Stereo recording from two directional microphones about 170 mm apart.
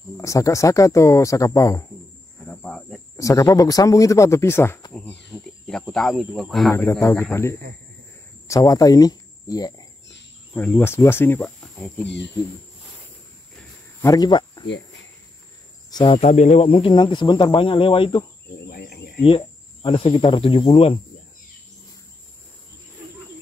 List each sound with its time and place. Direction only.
0.2 s speech: 20° left (ahead or behind)
2.4 s cricket: 5° left (ahead or behind)
3.2 s speech: 20° left (ahead or behind)
5.3 s speech: centre (ahead or behind)
6.7 s speech: 15° left (ahead or behind)
10.5 s speech: 10° left (ahead or behind)
14.0 s speech: 20° left (ahead or behind)
15.9 s speech: 30° left (ahead or behind)
16.2 s speech: 40° left (ahead or behind)
18.7 s a sound: 65° left (ahead or behind)
19.2 s speech: 30° left (ahead or behind)